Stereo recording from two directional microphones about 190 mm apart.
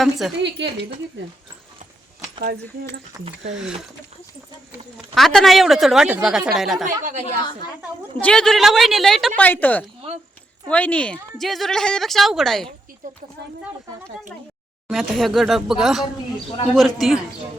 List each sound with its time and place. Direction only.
0.0 s a woman's voice: centre (ahead or behind)
0.6 s speech: 65° right (ahead or behind)
5.1 s a woman's voice: centre (ahead or behind)
7.0 s a woman's voice: 40° right (ahead or behind)
7.8 s a woman's voice: 5° left (ahead or behind)
14.8 s a woman's voice: centre (ahead or behind)